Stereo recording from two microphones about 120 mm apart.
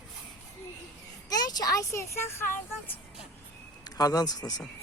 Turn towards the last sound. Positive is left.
turn(degrees=35)  # may be behind; listen again after turning